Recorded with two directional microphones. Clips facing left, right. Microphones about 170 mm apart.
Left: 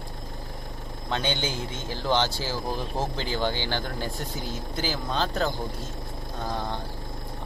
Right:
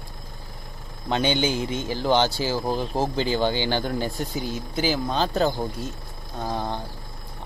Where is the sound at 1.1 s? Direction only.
10° right (ahead or behind).